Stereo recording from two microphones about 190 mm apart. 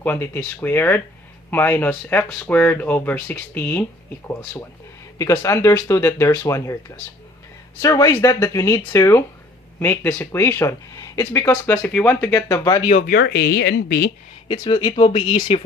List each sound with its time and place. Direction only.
0.0 s speech: 10° left (ahead or behind)
5.1 s speech: 15° left (ahead or behind)
7.8 s speech: 15° left (ahead or behind)
12.9 s speech: 40° left (ahead or behind)
13.1 s speech: 60° left (ahead or behind)
14.4 s speech: 20° left (ahead or behind)